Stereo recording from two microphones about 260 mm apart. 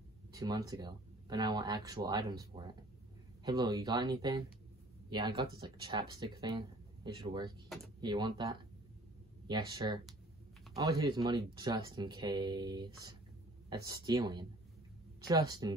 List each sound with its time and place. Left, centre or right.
0.3 s speech: centre